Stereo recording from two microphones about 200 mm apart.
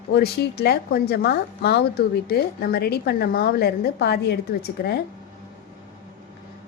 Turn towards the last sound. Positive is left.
turn(degrees=50)  # may be behind; listen again after turning